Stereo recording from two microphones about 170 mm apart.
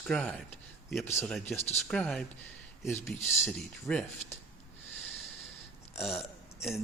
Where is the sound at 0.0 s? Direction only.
Centre (ahead or behind).